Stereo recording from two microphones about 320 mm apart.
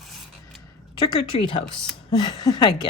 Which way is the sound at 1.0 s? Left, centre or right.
Centre.